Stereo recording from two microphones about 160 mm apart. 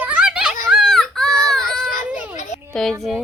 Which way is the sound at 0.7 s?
Centre (ahead or behind).